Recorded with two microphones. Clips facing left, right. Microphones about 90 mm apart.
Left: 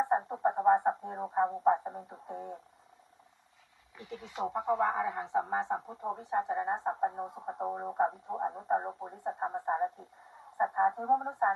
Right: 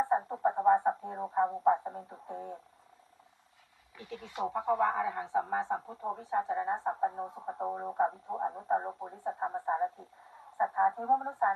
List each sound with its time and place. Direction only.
0.0 s a sound: 15° left (ahead or behind)
1.6 s speech: 20° left (ahead or behind)
3.9 s a woman's voice: 20° left (ahead or behind)